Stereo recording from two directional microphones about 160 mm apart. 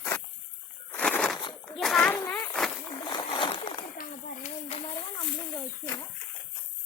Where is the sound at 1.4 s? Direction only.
30° left (ahead or behind).